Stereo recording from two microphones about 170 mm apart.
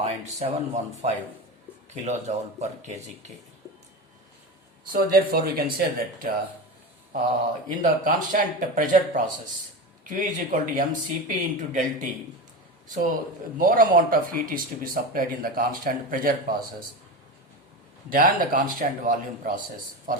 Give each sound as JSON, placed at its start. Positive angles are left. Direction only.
{"t": 0.0, "sound": "speech", "side_deg": -40}
{"t": 4.9, "sound": "speech", "side_deg": -60}
{"t": 7.7, "sound": "speech", "side_deg": -50}
{"t": 13.6, "sound": "speech", "side_deg": -55}
{"t": 18.1, "sound": "speech", "side_deg": -55}